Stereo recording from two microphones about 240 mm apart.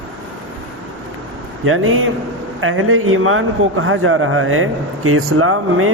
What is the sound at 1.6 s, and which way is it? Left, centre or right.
A man's voice, right.